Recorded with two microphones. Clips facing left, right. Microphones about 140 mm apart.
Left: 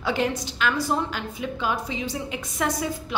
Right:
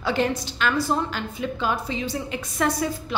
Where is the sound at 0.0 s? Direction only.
15° left (ahead or behind).